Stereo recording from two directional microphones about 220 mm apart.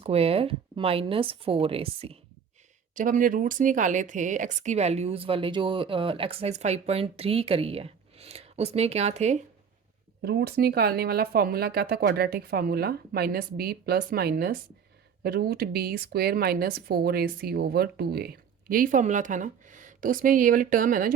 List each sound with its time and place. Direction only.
0.0 s a woman's voice: 25° right (ahead or behind)
2.9 s a woman's voice: 35° right (ahead or behind)
10.2 s a woman's voice: 45° right (ahead or behind)